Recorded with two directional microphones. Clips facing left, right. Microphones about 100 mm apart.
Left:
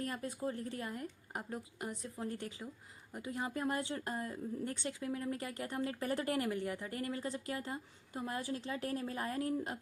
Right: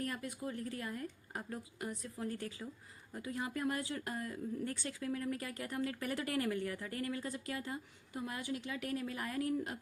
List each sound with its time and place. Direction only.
0.0 s speech: 30° left (ahead or behind)